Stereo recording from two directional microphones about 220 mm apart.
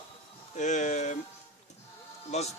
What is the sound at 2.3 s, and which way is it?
Speech, 30° left (ahead or behind).